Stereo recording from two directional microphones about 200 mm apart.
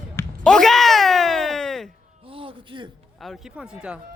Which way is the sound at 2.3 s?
25° right (ahead or behind).